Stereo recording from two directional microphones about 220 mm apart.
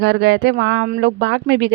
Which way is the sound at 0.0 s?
55° right (ahead or behind).